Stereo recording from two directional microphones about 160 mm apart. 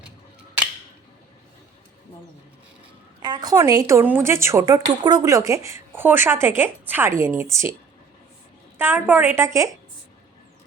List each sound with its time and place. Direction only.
3.2 s a woman's voice: 25° right (ahead or behind)
8.8 s a woman's voice: 10° right (ahead or behind)